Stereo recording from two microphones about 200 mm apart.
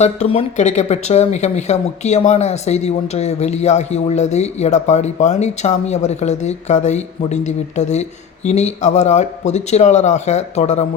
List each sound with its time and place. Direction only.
0.0 s speech: 30° left (ahead or behind)